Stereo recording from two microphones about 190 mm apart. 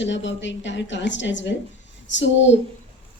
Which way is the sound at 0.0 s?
75° left (ahead or behind).